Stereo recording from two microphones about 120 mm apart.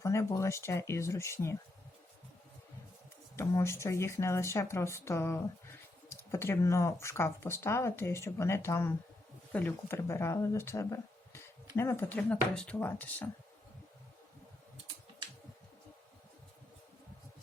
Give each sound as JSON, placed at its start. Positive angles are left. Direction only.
{"t": 0.0, "sound": "speech", "side_deg": 25}
{"t": 3.3, "sound": "speech", "side_deg": 20}